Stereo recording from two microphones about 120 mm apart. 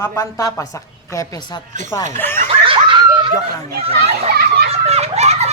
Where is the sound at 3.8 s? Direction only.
60° right (ahead or behind).